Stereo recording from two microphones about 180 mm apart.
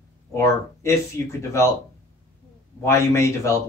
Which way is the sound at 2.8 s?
15° left (ahead or behind).